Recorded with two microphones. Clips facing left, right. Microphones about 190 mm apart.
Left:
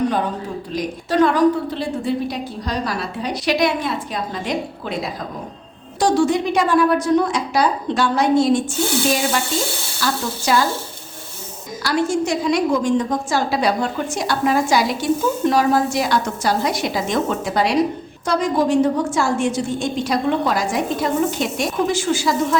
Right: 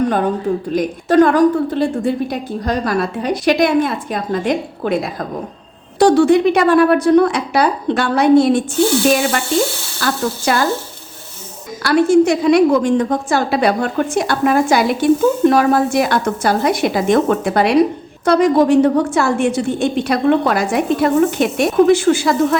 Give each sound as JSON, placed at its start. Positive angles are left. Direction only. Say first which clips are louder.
{"t": 0.7, "sound": "a woman's voice", "louder": "right 5 dB", "side_deg": -50}
{"t": 6.0, "sound": "a woman's voice", "louder": "right 7 dB", "side_deg": -60}
{"t": 10.0, "sound": "a woman's voice", "louder": "right 5 dB", "side_deg": -55}
{"t": 11.8, "sound": "a woman's voice", "louder": "right 8 dB", "side_deg": -60}